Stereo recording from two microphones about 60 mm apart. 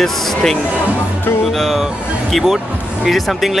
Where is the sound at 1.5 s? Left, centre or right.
Centre.